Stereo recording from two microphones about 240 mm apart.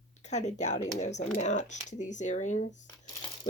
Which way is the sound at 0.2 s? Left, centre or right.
Left.